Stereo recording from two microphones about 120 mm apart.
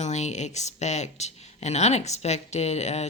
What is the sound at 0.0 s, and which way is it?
Speech, 70° left (ahead or behind).